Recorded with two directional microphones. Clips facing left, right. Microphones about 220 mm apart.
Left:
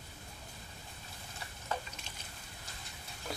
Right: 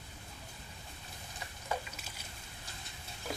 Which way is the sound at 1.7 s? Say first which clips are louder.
Right 1 dB; 10° right (ahead or behind).